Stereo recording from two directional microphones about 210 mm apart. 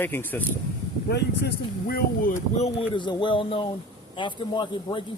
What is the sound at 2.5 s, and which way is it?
Speech, 30° left (ahead or behind).